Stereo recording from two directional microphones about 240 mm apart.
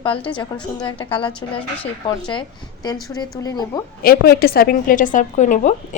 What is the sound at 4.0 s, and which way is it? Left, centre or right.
A woman's voice, left.